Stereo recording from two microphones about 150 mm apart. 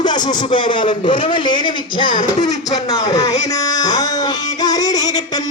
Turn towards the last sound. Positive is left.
turn(degrees=25)  # may be behind; listen again after turning